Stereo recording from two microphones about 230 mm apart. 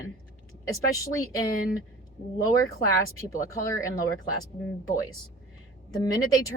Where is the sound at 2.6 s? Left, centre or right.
Centre.